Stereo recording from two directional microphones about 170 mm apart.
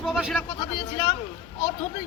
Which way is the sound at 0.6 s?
25° left (ahead or behind).